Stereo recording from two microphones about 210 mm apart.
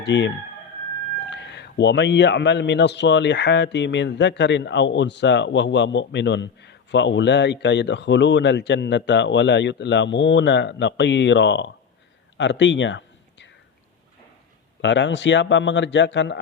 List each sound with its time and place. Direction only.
0.0 s a man's voice: 55° left (ahead or behind)
12.4 s a sound: 60° left (ahead or behind)
14.8 s a man's voice: 60° left (ahead or behind)